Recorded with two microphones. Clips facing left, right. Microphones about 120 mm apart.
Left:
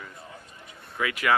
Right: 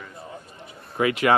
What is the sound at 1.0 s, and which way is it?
Speech, 30° right (ahead or behind).